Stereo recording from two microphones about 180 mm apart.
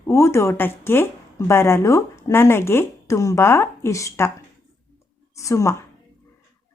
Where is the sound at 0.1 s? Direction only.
15° left (ahead or behind).